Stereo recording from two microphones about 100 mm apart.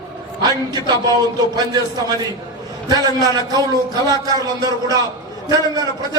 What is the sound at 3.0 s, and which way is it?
Speech, 40° right (ahead or behind).